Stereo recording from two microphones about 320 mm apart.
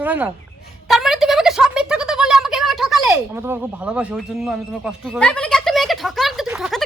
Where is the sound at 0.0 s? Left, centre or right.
Centre.